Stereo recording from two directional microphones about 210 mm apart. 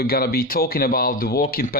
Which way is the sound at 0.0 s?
45° left (ahead or behind).